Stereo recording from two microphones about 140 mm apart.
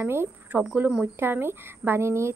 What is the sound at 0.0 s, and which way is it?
Speech, 15° right (ahead or behind).